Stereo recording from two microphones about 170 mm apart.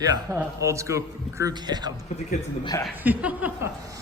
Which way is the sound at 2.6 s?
25° left (ahead or behind).